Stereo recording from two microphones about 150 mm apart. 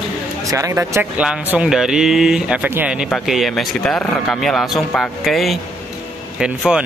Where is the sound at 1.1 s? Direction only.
10° right (ahead or behind).